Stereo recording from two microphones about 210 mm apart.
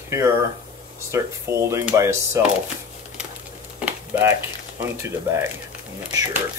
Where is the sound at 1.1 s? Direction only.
15° right (ahead or behind).